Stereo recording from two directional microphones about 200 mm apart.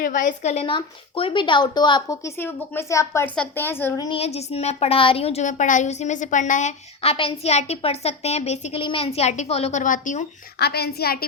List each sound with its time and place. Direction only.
0.0 s a woman's voice: 40° left (ahead or behind); by 4.2 s 20° left (ahead or behind)
4.2 s a woman's voice: 30° left (ahead or behind)
10.6 s a woman's voice: 55° left (ahead or behind)